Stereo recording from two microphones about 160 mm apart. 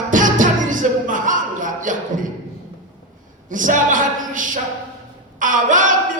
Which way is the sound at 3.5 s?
55° right (ahead or behind).